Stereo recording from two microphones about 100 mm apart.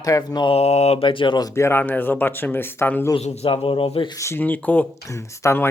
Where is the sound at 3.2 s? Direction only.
90° left; by 4.1 s 65° left (ahead or behind).